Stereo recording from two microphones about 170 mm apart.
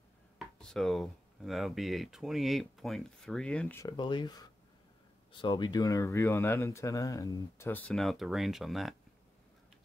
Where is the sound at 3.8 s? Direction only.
25° left (ahead or behind).